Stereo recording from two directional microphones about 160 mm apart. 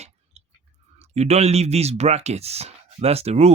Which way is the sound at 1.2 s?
40° right (ahead or behind).